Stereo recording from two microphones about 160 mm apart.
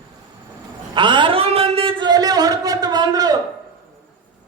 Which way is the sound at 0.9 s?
30° right (ahead or behind).